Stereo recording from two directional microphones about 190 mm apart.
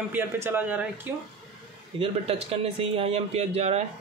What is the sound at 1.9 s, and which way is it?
Speech, 30° right (ahead or behind).